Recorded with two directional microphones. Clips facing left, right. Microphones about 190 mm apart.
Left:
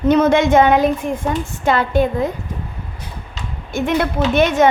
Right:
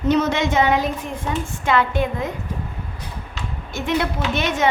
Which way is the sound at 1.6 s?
35° left (ahead or behind).